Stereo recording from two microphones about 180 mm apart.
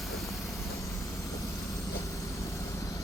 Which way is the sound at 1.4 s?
15° left (ahead or behind).